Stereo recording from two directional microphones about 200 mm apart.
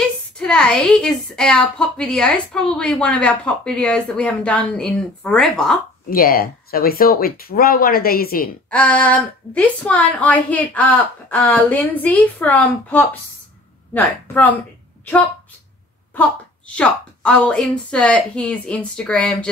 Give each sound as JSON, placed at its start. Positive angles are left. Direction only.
{"t": 0.0, "sound": "a woman's voice", "side_deg": 5}
{"t": 6.0, "sound": "speech", "side_deg": 45}
{"t": 8.6, "sound": "a woman's voice", "side_deg": 5}
{"t": 16.2, "sound": "a woman's voice", "side_deg": 5}